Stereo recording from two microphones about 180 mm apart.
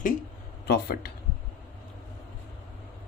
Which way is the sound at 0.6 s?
60° left (ahead or behind).